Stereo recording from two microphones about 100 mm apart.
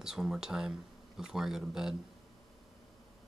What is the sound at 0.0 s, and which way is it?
Speech, 5° right (ahead or behind).